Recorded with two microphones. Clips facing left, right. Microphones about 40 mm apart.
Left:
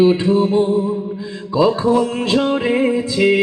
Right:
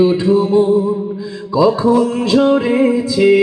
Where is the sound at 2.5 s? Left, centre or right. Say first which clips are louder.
Right 3 dB; left.